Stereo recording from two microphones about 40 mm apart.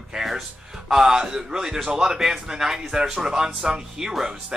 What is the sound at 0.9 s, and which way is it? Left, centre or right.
Speech, centre.